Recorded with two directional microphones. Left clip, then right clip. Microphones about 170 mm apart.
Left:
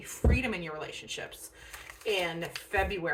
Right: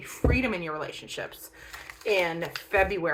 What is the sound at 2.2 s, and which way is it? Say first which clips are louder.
Speech: right 5 dB; 15° left (ahead or behind).